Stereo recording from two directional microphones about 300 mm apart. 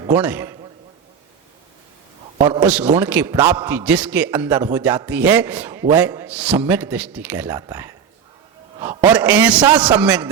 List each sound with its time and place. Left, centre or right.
0.0 s a man's voice: centre
2.4 s a man's voice: centre
2.6 s a man's voice: centre